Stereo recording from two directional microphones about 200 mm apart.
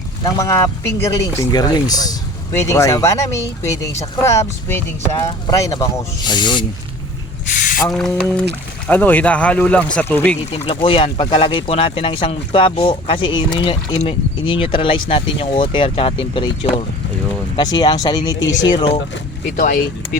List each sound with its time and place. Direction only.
0.3 s speech: 15° left (ahead or behind)
7.4 s a sound: 40° left (ahead or behind)
7.9 s boiling: 5° left (ahead or behind)
8.9 s speech: 10° left (ahead or behind)
10.5 s speech: 30° left (ahead or behind)
17.6 s speech: 20° left (ahead or behind)
18.3 s speech: 65° left (ahead or behind)
19.5 s speech: 45° left (ahead or behind)